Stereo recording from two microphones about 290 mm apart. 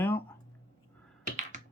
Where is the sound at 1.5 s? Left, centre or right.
Right.